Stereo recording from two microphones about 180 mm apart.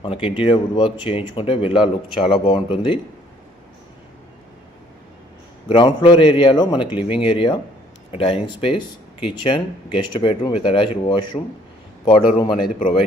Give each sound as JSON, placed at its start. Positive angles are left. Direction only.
{"t": 0.0, "sound": "speech", "side_deg": 30}
{"t": 5.6, "sound": "speech", "side_deg": 25}